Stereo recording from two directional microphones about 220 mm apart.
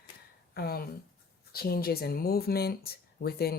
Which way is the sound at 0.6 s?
45° left (ahead or behind).